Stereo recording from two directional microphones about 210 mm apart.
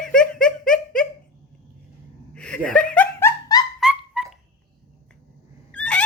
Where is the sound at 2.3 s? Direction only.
5° left (ahead or behind).